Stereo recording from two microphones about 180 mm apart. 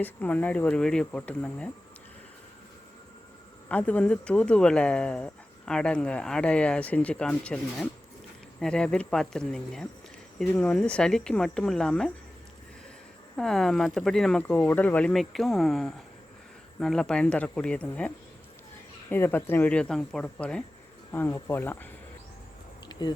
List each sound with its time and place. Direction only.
0.0 s speech: 10° left (ahead or behind)
3.7 s speech: 10° left (ahead or behind)
13.3 s speech: centre (ahead or behind)
19.1 s speech: 10° left (ahead or behind)
22.9 s a sound: 25° left (ahead or behind)